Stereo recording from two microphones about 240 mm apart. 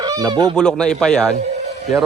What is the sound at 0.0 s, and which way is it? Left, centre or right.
Fowl, centre.